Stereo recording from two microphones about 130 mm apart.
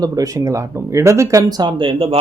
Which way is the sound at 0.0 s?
25° right (ahead or behind).